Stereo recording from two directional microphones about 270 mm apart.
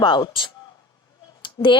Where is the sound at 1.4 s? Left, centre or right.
Centre.